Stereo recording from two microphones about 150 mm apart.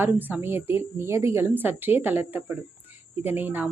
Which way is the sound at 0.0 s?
10° right (ahead or behind).